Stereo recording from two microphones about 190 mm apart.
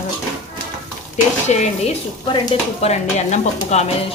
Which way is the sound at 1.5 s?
35° left (ahead or behind).